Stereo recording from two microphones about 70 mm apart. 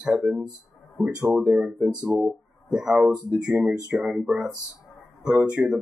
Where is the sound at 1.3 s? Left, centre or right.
Centre.